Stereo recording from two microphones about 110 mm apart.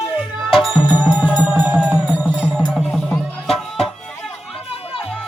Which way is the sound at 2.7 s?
Centre (ahead or behind).